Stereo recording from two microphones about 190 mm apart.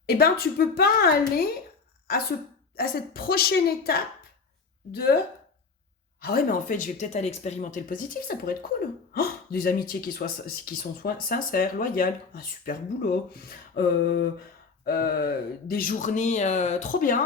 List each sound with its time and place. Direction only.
0.0 s speech: 55° left (ahead or behind)
2.7 s speech: 50° left (ahead or behind)
6.2 s speech: 50° left (ahead or behind)